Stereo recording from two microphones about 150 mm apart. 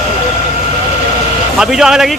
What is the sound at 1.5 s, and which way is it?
Speech, 5° right (ahead or behind).